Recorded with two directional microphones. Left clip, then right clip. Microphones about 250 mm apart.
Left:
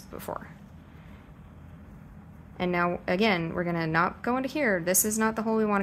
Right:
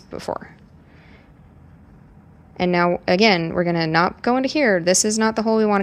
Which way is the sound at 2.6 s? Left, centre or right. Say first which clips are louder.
Right 9 dB; right.